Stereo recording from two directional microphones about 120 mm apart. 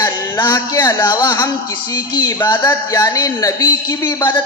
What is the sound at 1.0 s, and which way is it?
A man's voice, 35° left (ahead or behind).